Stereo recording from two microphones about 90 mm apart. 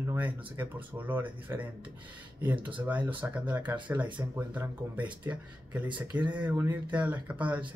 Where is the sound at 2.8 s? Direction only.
15° right (ahead or behind).